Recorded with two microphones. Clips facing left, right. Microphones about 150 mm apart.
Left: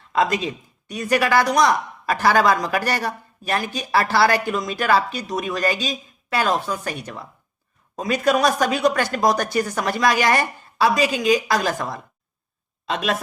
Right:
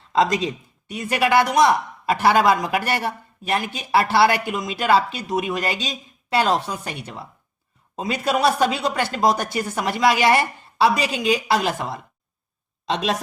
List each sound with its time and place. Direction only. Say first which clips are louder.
0.1 s speech: right 1 dB; 30° right (ahead or behind)
6.7 s speech: left 3 dB; 15° right (ahead or behind)
7.0 s speech: left 1 dB; 25° right (ahead or behind)